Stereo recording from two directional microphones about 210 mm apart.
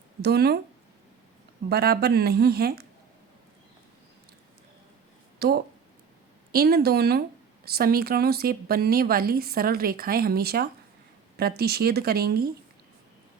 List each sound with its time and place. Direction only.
0.2 s a woman's voice: 50° right (ahead or behind)
1.7 s a woman's voice: 45° right (ahead or behind)
5.4 s a woman's voice: 50° right (ahead or behind)